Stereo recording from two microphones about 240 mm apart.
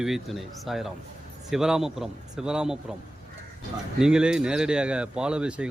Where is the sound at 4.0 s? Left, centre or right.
Centre.